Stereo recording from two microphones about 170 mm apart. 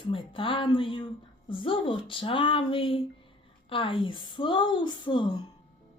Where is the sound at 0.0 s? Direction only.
30° left (ahead or behind).